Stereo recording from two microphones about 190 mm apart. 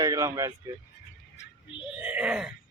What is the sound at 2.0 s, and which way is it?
Groan, 10° right (ahead or behind).